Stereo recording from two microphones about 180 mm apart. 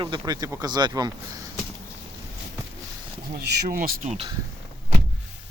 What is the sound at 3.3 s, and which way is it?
Speech, 60° right (ahead or behind).